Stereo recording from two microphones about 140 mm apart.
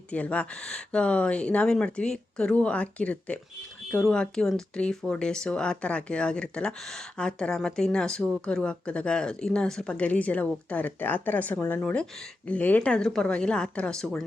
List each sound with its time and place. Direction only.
0.1 s speech: 10° left (ahead or behind)